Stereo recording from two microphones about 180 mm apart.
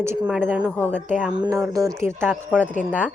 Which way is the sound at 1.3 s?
20° right (ahead or behind).